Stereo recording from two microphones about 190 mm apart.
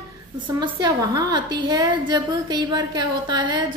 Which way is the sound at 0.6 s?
20° right (ahead or behind).